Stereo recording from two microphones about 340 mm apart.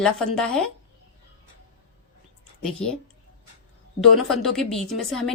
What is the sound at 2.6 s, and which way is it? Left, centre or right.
Speech, centre.